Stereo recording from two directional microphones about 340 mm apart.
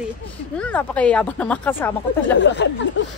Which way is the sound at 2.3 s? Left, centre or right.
Left.